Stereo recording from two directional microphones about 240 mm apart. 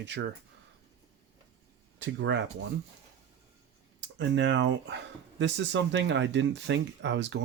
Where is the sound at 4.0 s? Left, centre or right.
Right.